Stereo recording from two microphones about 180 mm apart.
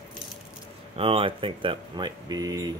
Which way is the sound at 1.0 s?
30° right (ahead or behind).